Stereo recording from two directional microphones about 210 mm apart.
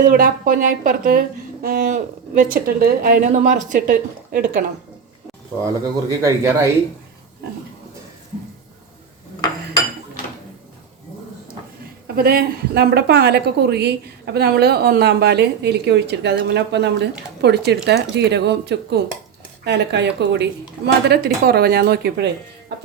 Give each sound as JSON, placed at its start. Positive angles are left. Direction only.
{"t": 0.0, "sound": "speech", "side_deg": -40}
{"t": 6.1, "sound": "speech", "side_deg": -15}
{"t": 12.0, "sound": "a woman's voice", "side_deg": -45}